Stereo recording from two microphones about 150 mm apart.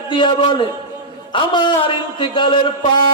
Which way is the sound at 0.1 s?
30° left (ahead or behind).